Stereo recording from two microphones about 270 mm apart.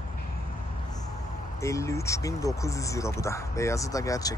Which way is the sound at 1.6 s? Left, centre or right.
Centre.